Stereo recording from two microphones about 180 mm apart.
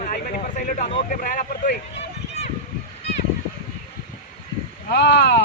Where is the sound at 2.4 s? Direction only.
40° left (ahead or behind).